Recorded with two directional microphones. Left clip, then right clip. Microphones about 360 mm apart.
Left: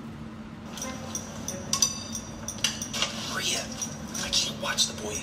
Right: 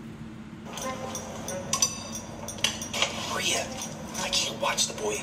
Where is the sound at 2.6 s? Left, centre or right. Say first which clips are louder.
Right 2 dB; centre.